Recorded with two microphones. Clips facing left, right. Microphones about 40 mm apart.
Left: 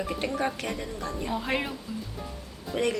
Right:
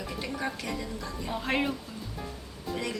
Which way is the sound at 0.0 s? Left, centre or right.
Left.